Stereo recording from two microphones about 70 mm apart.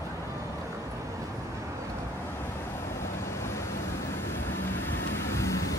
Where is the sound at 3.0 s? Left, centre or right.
Left.